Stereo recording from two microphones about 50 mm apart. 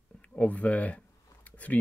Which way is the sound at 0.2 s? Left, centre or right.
Left.